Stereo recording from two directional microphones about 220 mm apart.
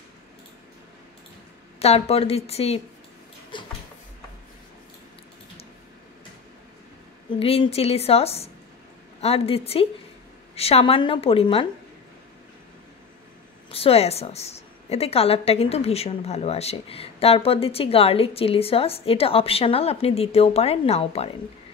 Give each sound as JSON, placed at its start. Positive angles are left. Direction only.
{"t": 1.8, "sound": "a woman's voice", "side_deg": 25}
{"t": 3.5, "sound": "a sound", "side_deg": 20}
{"t": 7.3, "sound": "a woman's voice", "side_deg": 25}
{"t": 13.7, "sound": "a woman's voice", "side_deg": 25}